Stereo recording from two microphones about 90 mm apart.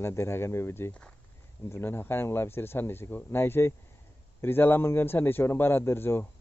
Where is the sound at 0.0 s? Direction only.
30° left (ahead or behind).